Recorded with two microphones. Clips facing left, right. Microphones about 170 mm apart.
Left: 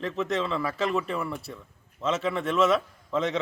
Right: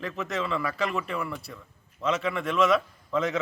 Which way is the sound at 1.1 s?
Centre (ahead or behind).